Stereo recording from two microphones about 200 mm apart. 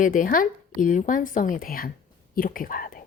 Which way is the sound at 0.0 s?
40° left (ahead or behind).